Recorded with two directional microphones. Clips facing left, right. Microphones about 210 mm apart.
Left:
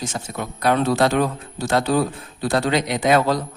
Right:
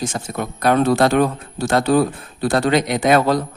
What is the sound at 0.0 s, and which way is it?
Speech, 50° right (ahead or behind).